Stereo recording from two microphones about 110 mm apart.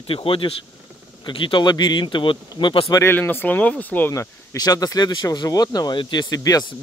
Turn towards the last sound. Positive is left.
turn(degrees=35)  # may be behind; listen again after turning